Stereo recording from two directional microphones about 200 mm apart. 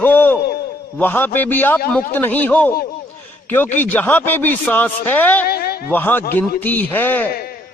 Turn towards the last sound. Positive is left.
turn(degrees=10)  # may be behind; listen again after turning